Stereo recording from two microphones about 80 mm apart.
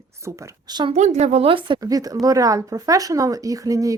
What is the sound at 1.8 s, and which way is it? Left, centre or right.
A woman's voice, right.